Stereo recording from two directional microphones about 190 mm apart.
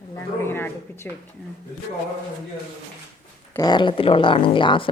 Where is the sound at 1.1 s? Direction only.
5° left (ahead or behind).